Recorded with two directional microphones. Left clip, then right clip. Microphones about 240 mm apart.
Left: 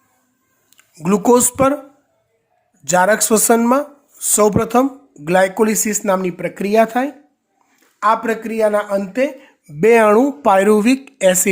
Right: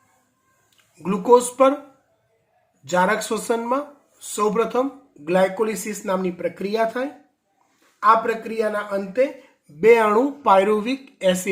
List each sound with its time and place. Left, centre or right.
1.0 s speech: left
2.8 s speech: left